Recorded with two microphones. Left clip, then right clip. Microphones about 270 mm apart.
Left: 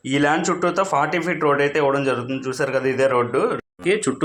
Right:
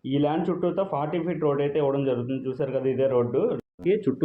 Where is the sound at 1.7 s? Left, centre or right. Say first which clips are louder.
Left 5 dB; left.